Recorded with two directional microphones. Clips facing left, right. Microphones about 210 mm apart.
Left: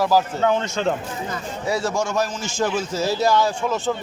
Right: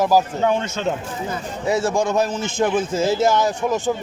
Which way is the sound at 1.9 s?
55° right (ahead or behind).